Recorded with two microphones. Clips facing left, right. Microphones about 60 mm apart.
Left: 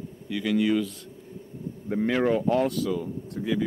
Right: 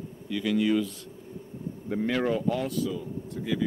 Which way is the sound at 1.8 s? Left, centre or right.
Centre.